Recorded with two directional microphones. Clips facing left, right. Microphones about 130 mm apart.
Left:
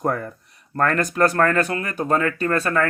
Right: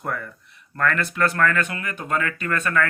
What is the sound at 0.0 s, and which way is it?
Speech, 40° left (ahead or behind).